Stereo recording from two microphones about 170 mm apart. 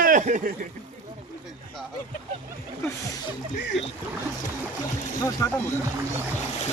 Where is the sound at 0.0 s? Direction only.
50° right (ahead or behind).